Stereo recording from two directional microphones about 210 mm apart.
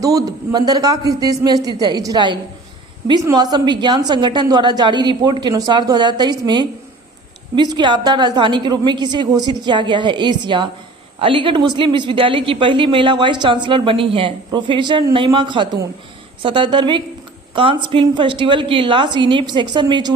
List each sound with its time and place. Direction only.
0.0 s a man's voice: 15° right (ahead or behind)